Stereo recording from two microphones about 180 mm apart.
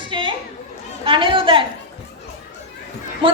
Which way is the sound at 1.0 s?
30° right (ahead or behind).